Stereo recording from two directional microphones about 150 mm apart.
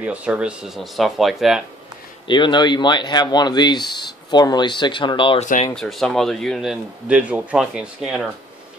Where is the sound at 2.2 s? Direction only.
30° left (ahead or behind).